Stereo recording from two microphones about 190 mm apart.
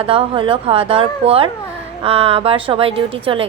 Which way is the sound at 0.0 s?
30° right (ahead or behind).